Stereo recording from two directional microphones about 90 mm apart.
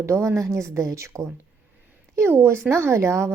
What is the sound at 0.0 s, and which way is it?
A woman's voice, 30° right (ahead or behind).